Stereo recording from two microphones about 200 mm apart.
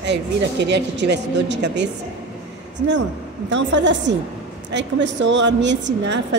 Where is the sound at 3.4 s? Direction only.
65° right (ahead or behind).